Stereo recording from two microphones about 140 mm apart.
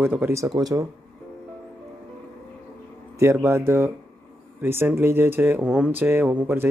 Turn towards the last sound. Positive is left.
turn(degrees=-15)  # may be behind; listen again after turning